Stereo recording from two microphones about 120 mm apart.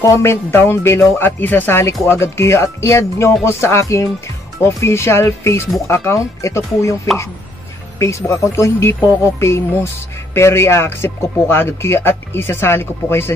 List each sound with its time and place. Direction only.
0.0 s speech: 25° left (ahead or behind)
8.0 s speech: 25° left (ahead or behind)